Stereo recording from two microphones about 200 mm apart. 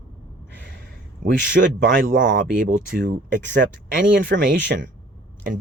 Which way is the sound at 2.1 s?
65° right (ahead or behind).